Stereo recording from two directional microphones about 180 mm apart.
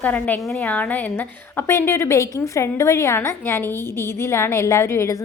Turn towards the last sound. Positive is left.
turn(degrees=15)  # may be behind; listen again after turning